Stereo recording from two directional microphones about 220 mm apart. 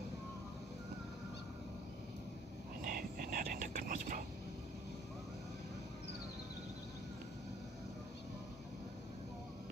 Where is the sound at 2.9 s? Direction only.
40° right (ahead or behind).